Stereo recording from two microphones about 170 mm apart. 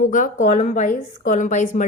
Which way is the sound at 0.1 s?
50° left (ahead or behind).